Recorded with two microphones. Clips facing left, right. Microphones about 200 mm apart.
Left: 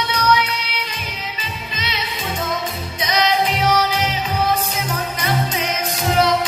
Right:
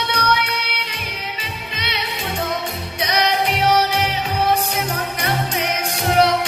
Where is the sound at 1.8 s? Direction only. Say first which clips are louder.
Even; 65° right (ahead or behind).